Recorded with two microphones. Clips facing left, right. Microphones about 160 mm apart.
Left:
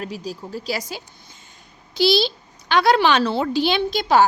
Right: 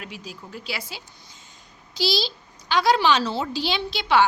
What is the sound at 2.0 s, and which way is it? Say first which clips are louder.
A woman's voice: left 7 dB; 60° left (ahead or behind).